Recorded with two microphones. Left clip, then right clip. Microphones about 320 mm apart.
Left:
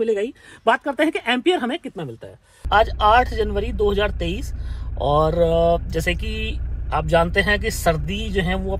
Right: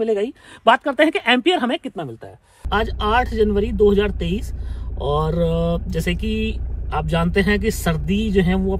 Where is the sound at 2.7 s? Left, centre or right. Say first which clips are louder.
Left 5 dB; centre.